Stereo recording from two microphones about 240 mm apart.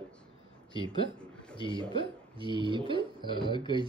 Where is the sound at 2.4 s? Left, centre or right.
Centre.